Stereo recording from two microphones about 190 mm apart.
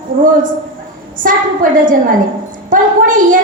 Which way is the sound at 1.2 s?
50° right (ahead or behind).